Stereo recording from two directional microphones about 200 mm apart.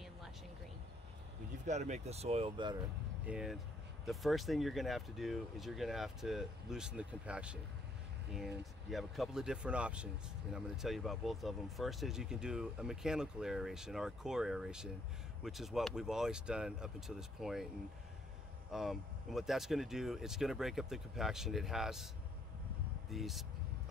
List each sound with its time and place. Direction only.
1.7 s speech: 35° right (ahead or behind)
3.3 s speech: 5° right (ahead or behind)
8.9 s speech: centre (ahead or behind)
18.7 s speech: centre (ahead or behind)
23.0 s speech: centre (ahead or behind)